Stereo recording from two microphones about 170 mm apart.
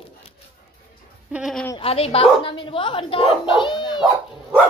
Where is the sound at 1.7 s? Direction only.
35° left (ahead or behind).